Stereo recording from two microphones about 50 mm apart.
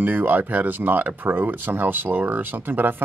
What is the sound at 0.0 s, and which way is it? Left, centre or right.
Speech, right.